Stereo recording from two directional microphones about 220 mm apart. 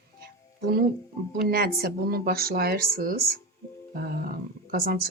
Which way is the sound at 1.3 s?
45° right (ahead or behind).